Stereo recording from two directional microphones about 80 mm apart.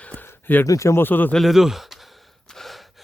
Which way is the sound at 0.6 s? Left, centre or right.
Left.